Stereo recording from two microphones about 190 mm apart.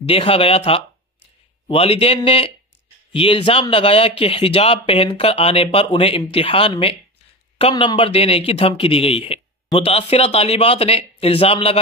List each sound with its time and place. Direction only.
0.0 s speech: 30° left (ahead or behind)